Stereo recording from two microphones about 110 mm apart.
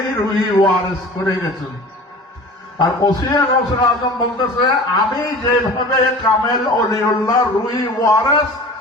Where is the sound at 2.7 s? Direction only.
40° left (ahead or behind).